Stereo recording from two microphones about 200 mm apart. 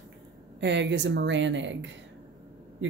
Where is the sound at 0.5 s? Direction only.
60° right (ahead or behind).